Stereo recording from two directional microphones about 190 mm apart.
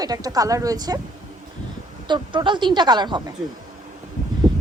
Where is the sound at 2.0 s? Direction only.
25° right (ahead or behind).